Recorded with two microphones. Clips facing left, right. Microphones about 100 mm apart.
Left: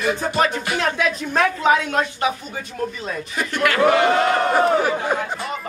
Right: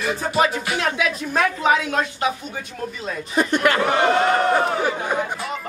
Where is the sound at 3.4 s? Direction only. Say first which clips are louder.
Right 2 dB; 20° right (ahead or behind).